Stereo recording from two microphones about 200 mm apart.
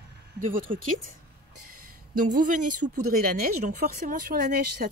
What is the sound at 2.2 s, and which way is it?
Speech, 40° right (ahead or behind).